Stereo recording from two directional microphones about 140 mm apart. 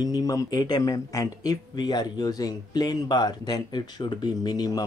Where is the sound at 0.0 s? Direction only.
25° left (ahead or behind).